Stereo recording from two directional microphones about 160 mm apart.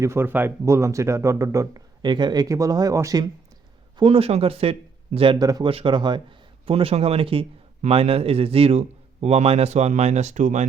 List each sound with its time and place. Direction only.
0.0 s speech: 15° right (ahead or behind)
3.9 s a man's voice: 35° right (ahead or behind)